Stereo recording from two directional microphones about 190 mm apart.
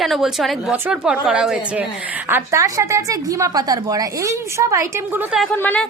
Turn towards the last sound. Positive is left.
turn(degrees=10)  # may be behind; listen again after turning